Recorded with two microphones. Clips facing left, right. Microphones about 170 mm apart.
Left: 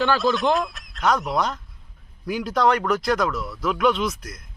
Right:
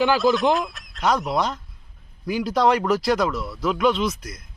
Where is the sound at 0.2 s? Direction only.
Centre (ahead or behind).